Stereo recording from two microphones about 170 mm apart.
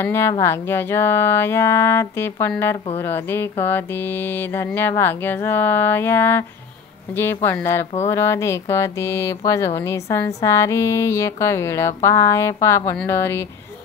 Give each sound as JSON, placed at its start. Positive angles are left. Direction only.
{"t": 0.0, "sound": "speech", "side_deg": 15}